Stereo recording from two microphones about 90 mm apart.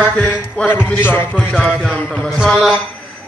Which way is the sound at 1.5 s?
5° right (ahead or behind).